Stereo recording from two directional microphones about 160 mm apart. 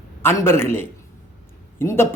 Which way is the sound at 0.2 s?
15° left (ahead or behind).